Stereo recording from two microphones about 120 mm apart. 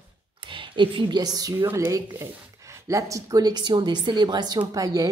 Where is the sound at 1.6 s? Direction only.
20° right (ahead or behind).